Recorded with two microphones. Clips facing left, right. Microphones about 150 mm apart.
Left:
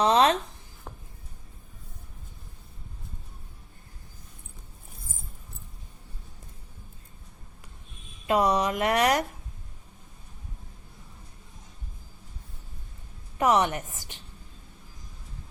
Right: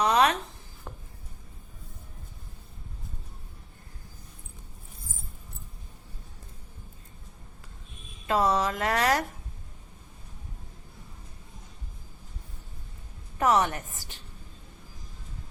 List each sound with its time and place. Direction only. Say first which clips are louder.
0.0 s a sound: left 2 dB; 30° left (ahead or behind)
8.3 s speech: left 2 dB; 15° left (ahead or behind)
13.4 s a woman's voice: left 1 dB; 15° left (ahead or behind)